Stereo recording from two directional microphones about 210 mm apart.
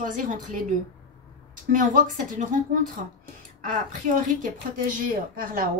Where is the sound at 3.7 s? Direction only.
40° right (ahead or behind).